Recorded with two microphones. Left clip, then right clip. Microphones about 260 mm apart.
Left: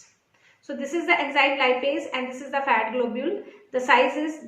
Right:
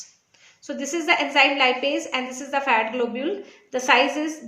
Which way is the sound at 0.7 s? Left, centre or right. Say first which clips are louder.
Right 1 dB; right.